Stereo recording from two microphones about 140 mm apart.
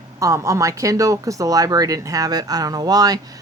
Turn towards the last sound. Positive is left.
turn(degrees=-25)  # may be behind; listen again after turning